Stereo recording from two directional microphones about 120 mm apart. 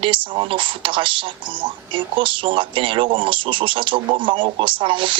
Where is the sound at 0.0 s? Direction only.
45° right (ahead or behind).